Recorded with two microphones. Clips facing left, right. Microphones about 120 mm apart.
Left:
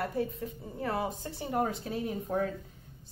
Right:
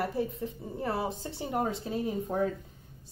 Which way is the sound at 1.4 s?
5° right (ahead or behind).